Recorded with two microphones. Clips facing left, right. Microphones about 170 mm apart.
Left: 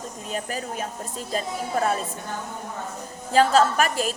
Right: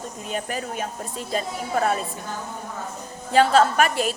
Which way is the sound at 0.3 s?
35° left (ahead or behind).